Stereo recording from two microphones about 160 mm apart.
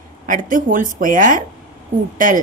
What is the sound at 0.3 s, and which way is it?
A woman's voice, 55° right (ahead or behind).